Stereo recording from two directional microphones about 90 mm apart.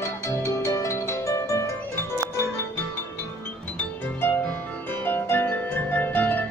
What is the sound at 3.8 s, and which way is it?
Music, 20° left (ahead or behind).